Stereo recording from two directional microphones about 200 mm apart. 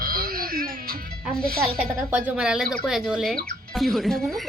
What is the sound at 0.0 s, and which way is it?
Music, 45° right (ahead or behind).